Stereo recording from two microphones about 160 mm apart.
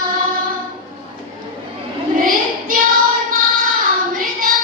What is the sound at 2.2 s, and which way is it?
Child singing, 60° right (ahead or behind).